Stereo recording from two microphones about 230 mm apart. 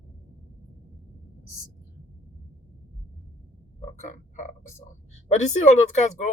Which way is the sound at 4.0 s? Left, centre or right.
Left.